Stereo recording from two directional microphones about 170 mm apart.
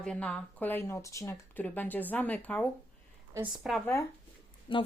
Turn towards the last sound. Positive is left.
turn(degrees=30)  # may be behind; listen again after turning